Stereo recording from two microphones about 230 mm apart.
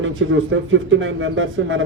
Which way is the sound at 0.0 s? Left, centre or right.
Right.